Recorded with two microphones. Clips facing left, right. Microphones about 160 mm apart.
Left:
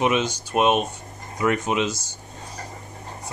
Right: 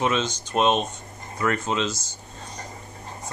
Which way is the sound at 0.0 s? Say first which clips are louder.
Left 3 dB; 15° left (ahead or behind).